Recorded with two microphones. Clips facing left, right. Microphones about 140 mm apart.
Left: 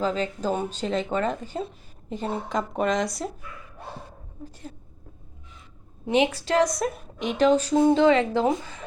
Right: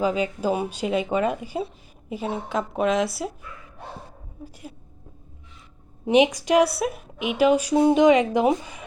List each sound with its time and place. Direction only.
0.0 s a woman's voice: 10° right (ahead or behind)
4.4 s a woman's voice: 10° right (ahead or behind)
6.1 s a woman's voice: 15° right (ahead or behind)